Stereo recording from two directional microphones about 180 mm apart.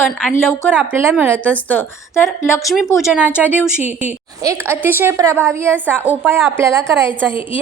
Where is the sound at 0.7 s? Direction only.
10° right (ahead or behind).